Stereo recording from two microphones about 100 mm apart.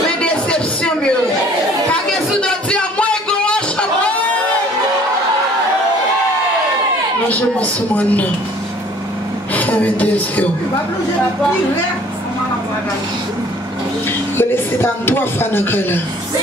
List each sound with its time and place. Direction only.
0.2 s music: 10° left (ahead or behind)
2.4 s music: 10° left (ahead or behind)
7.2 s speech: 15° left (ahead or behind)
9.5 s a woman's voice: 15° left (ahead or behind)
14.4 s speech: 20° left (ahead or behind)